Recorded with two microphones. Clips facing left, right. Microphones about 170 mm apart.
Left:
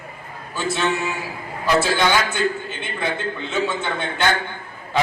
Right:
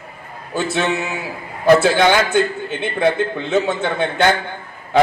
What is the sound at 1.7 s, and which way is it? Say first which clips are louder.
A man's voice: right 7 dB; 60° right (ahead or behind).